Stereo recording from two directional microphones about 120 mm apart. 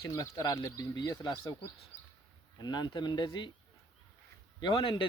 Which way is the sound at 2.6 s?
35° left (ahead or behind).